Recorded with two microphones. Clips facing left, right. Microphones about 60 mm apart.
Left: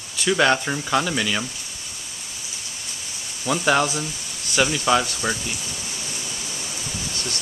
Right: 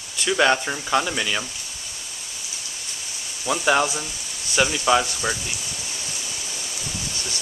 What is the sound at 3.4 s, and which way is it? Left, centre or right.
Speech, centre.